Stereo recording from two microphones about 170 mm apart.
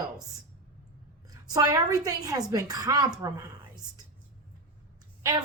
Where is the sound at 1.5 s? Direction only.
20° right (ahead or behind).